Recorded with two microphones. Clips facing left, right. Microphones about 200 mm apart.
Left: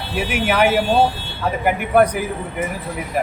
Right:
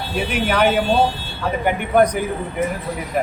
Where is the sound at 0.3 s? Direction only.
10° left (ahead or behind).